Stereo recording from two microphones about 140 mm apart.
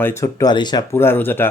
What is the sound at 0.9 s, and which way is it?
Speech, 15° left (ahead or behind).